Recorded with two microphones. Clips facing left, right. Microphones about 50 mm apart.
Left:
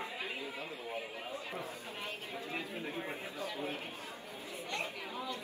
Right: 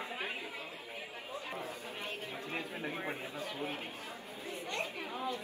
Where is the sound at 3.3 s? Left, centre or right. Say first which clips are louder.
Even; right.